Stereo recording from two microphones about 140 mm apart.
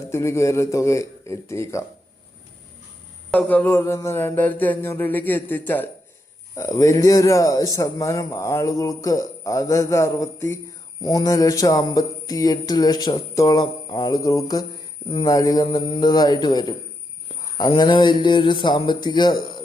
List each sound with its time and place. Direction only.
0.1 s speech: 20° left (ahead or behind)
3.3 s a sound: 10° left (ahead or behind)
6.6 s speech: 25° left (ahead or behind)